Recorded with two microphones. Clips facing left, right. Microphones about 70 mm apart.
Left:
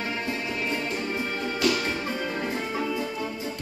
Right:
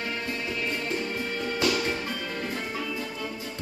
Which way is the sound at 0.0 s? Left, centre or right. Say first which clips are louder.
Left 2 dB; left.